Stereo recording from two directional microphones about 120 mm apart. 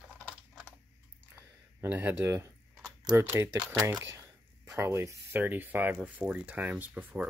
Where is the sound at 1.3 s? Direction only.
15° right (ahead or behind).